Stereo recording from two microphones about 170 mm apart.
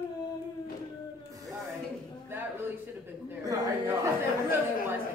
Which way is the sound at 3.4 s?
20° right (ahead or behind).